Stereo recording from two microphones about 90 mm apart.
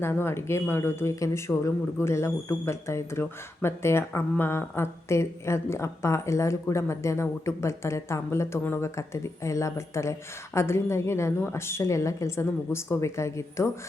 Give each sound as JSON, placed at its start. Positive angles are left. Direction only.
{"t": 0.0, "sound": "speech", "side_deg": 25}